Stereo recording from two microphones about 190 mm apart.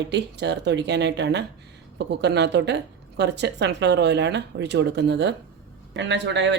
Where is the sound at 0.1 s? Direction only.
65° right (ahead or behind).